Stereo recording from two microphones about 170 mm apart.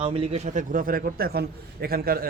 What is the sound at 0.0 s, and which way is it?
A man's voice, 35° right (ahead or behind).